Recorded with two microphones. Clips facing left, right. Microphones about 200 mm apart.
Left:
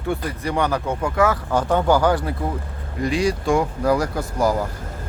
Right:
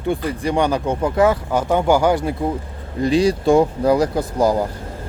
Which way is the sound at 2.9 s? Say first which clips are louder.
Right 5 dB; 30° right (ahead or behind).